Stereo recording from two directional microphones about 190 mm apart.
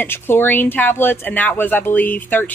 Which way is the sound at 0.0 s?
10° left (ahead or behind).